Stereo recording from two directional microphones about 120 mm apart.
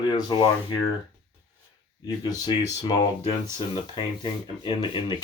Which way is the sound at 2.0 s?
35° left (ahead or behind).